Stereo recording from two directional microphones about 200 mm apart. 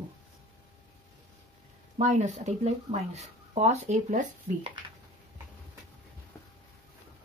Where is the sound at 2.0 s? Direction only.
35° right (ahead or behind).